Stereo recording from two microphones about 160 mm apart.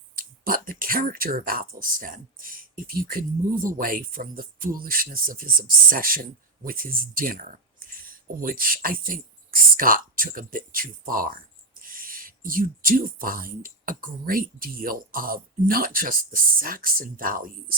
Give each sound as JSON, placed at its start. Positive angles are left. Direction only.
{"t": 0.2, "sound": "speech", "side_deg": -60}